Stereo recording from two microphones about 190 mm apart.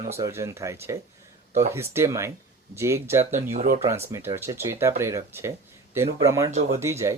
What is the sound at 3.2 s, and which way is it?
Speech, 35° right (ahead or behind).